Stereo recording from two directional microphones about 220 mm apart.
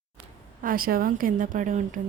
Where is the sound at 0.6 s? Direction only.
40° right (ahead or behind).